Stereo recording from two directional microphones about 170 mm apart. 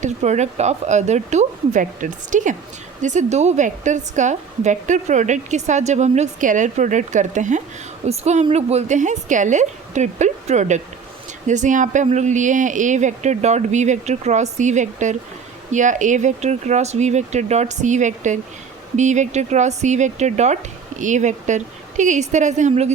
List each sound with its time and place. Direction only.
0.0 s a woman's voice: 40° right (ahead or behind)